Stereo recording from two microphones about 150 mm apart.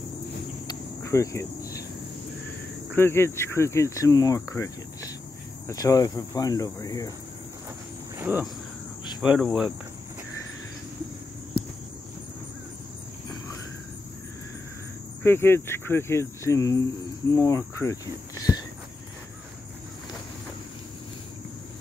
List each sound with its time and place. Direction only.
0.7 s cricket: 20° left (ahead or behind)
2.9 s speech: 15° left (ahead or behind)
8.2 s speech: 10° right (ahead or behind)
15.2 s speech: 15° left (ahead or behind)